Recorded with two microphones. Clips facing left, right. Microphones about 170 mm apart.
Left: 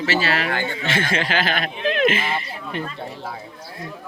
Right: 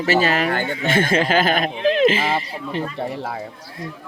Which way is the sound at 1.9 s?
30° right (ahead or behind).